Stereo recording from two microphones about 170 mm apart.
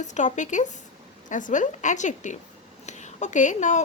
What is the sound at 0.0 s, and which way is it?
A woman's voice, 45° left (ahead or behind).